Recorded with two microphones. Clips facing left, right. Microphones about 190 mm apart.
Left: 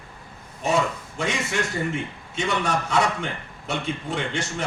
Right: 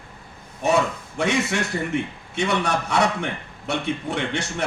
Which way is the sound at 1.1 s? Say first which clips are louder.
Right 4 dB; 70° right (ahead or behind).